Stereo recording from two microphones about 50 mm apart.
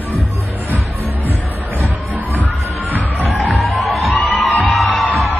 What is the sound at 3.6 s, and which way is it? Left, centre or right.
Music, centre.